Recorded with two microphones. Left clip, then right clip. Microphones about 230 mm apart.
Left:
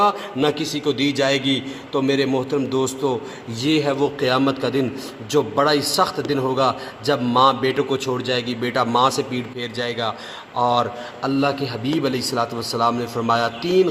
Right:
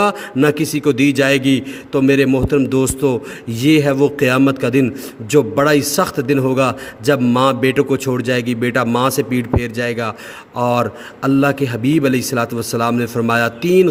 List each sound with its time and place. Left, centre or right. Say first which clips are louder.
0.0 s a man's voice: right 3 dB; right